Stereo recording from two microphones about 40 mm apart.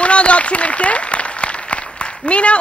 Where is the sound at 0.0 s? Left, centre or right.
Left.